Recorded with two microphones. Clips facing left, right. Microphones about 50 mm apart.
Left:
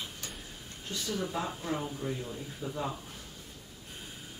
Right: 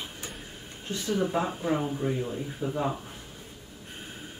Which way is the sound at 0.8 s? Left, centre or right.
Right.